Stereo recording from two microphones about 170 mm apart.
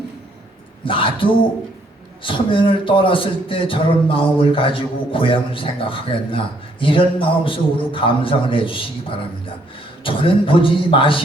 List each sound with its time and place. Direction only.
0.9 s speech: 30° left (ahead or behind)